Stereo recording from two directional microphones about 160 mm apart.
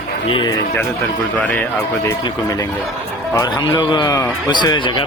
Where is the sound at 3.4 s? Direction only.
25° left (ahead or behind).